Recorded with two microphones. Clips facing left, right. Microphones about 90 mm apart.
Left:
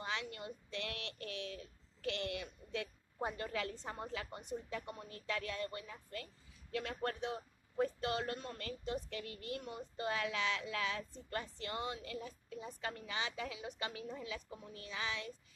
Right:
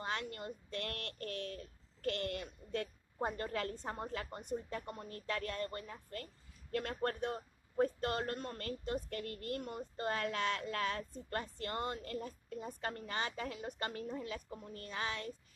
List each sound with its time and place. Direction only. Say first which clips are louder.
0.0 s a man's voice: right 2 dB; 45° right (ahead or behind)